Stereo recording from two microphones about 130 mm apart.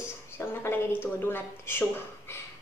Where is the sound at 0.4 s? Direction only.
20° left (ahead or behind).